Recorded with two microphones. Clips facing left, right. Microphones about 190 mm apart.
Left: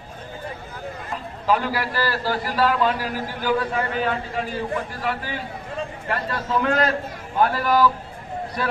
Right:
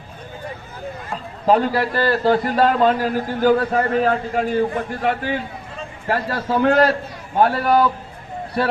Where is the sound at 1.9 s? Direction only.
55° right (ahead or behind).